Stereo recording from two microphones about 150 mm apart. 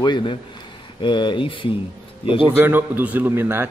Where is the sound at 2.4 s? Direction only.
15° right (ahead or behind).